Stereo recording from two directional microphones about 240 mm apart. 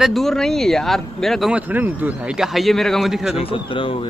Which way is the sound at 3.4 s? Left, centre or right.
Left.